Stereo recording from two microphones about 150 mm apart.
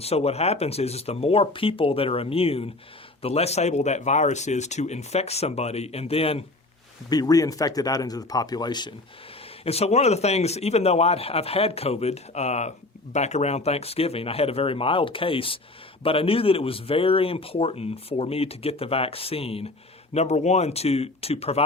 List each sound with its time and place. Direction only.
0.0 s a man's voice: 45° left (ahead or behind)
7.1 s speech: 25° left (ahead or behind)
9.6 s a man's voice: 45° left (ahead or behind)